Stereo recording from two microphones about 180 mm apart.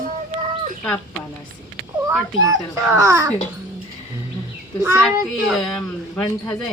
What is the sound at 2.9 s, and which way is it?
Speech, 15° right (ahead or behind).